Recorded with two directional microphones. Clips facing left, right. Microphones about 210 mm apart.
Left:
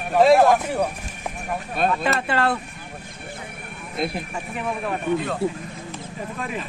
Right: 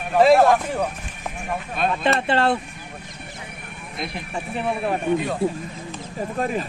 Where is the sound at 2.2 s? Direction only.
25° right (ahead or behind).